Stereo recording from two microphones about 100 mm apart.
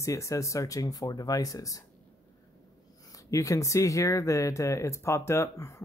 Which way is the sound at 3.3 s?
35° left (ahead or behind).